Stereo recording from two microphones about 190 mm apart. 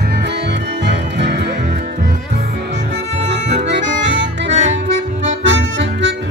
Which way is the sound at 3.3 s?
70° right (ahead or behind).